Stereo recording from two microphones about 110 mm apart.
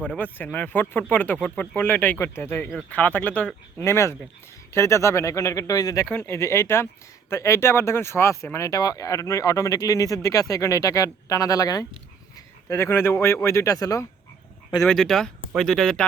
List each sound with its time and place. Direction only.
0.0 s speech: 10° left (ahead or behind); by 6.1 s 35° left (ahead or behind)
6.1 s speech: 20° left (ahead or behind)
12.6 s speech: 25° left (ahead or behind)
14.8 s speech: 5° left (ahead or behind)